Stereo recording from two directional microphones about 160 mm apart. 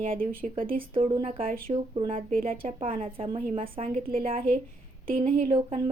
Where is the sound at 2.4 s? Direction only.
35° right (ahead or behind).